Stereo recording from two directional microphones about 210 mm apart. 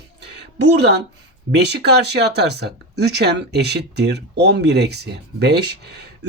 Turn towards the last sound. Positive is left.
turn(degrees=-50)  # may be behind; listen again after turning